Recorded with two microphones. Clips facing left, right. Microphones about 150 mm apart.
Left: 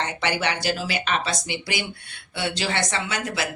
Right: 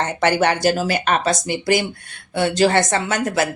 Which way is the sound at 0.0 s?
45° right (ahead or behind).